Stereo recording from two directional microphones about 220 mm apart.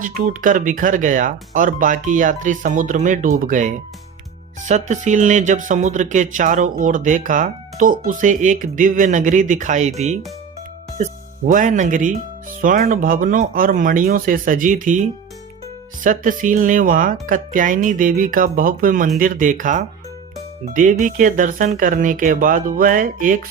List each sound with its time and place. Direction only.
0.0 s speech: 35° right (ahead or behind)
4.7 s speech: 35° right (ahead or behind)
16.0 s speech: 35° right (ahead or behind)
21.0 s speech: 35° right (ahead or behind)